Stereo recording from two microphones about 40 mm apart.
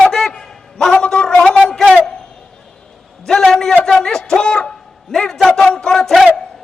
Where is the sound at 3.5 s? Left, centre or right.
Centre.